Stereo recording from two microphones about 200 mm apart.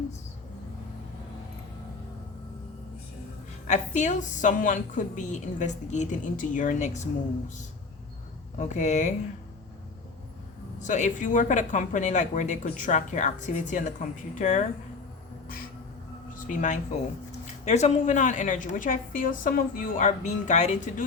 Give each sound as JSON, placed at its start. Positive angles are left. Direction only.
{"t": 3.7, "sound": "speech", "side_deg": 35}
{"t": 8.5, "sound": "speech", "side_deg": 35}
{"t": 10.8, "sound": "speech", "side_deg": 35}
{"t": 16.5, "sound": "speech", "side_deg": 40}